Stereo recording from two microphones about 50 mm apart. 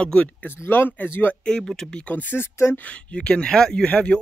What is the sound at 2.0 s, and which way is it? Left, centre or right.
Speech, left.